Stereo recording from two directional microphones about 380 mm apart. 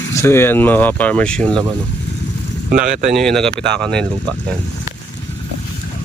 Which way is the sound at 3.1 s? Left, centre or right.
Centre.